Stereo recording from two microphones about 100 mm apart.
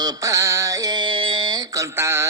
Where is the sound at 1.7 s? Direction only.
30° right (ahead or behind).